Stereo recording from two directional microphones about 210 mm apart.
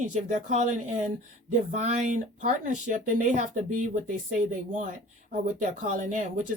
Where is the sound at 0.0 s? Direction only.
35° right (ahead or behind).